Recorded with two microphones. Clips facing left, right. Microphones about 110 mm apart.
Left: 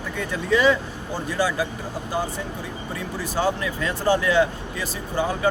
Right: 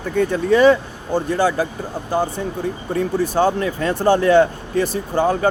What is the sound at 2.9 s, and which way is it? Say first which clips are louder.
Speech: right 10 dB; 50° right (ahead or behind).